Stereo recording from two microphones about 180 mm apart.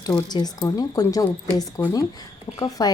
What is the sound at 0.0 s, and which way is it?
A woman's voice, 20° left (ahead or behind).